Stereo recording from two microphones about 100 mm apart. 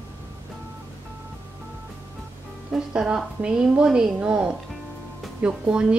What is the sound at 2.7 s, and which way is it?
A woman's voice, 10° right (ahead or behind).